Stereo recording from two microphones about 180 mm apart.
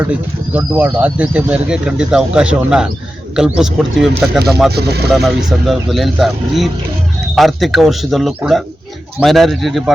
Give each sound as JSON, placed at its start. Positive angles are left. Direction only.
{"t": 0.5, "sound": "speech", "side_deg": -10}
{"t": 4.7, "sound": "speech", "side_deg": -65}
{"t": 5.0, "sound": "speech", "side_deg": 0}